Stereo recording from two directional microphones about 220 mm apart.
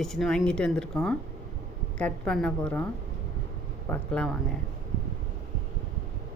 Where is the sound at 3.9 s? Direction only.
5° left (ahead or behind).